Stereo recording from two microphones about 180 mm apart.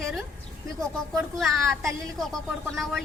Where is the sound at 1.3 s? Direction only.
Centre (ahead or behind).